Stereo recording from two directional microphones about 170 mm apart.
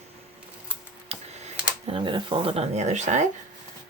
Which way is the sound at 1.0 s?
40° right (ahead or behind).